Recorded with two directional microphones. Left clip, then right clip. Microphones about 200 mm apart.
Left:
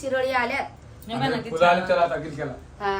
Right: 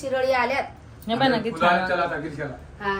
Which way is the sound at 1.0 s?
30° right (ahead or behind).